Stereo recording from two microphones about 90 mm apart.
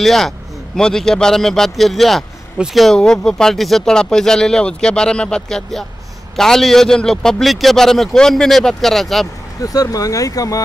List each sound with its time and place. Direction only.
0.0 s a man's voice: 5° left (ahead or behind)
9.6 s speech: 40° left (ahead or behind)